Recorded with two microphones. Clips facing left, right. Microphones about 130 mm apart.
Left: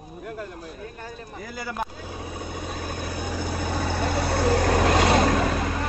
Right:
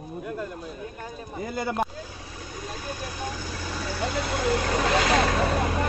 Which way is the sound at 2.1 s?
60° left (ahead or behind).